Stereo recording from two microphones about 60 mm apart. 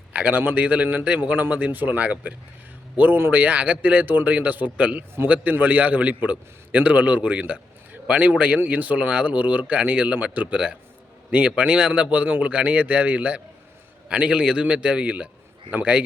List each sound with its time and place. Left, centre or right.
0.1 s speech: right
3.4 s speech: right